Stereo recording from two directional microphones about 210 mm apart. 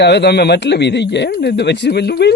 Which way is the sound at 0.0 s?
55° left (ahead or behind).